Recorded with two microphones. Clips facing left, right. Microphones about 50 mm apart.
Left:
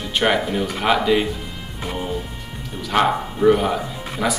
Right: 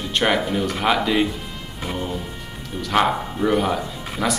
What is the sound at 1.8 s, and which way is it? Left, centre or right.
Music, centre.